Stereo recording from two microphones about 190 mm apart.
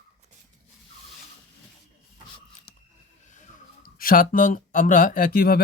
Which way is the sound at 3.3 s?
45° left (ahead or behind).